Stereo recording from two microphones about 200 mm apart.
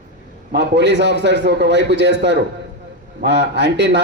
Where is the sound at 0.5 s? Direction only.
60° right (ahead or behind).